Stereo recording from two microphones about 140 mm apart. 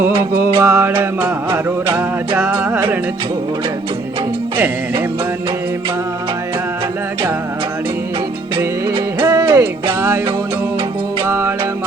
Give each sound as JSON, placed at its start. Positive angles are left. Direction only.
{"t": 0.2, "sound": "music", "side_deg": -20}
{"t": 4.5, "sound": "music", "side_deg": -15}
{"t": 9.2, "sound": "music", "side_deg": -20}
{"t": 11.3, "sound": "music", "side_deg": -20}